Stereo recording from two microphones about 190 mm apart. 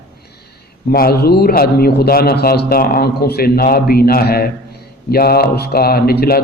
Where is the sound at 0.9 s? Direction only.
50° left (ahead or behind).